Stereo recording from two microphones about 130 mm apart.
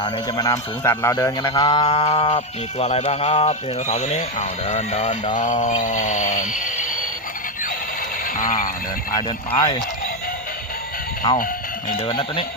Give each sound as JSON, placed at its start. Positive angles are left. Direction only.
{"t": 0.3, "sound": "speech", "side_deg": 25}
{"t": 1.4, "sound": "music", "side_deg": 35}
{"t": 5.4, "sound": "a sound", "side_deg": 75}
{"t": 8.4, "sound": "speech", "side_deg": 90}
{"t": 9.6, "sound": "speech", "side_deg": 35}
{"t": 11.2, "sound": "speech", "side_deg": 30}